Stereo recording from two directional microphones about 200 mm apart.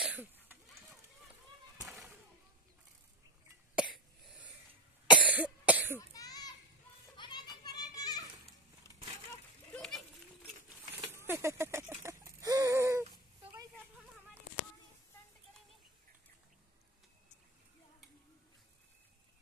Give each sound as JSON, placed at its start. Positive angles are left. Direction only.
{"t": 0.0, "sound": "a sound", "side_deg": -5}
{"t": 3.7, "sound": "cough", "side_deg": -5}
{"t": 5.9, "sound": "cough", "side_deg": 15}
{"t": 7.2, "sound": "children playing", "side_deg": 20}
{"t": 8.8, "sound": "splinter", "side_deg": 15}
{"t": 9.8, "sound": "children playing", "side_deg": 0}
{"t": 10.9, "sound": "a sound", "side_deg": -10}